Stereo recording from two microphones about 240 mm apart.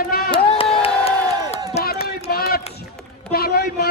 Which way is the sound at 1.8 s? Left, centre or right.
Left.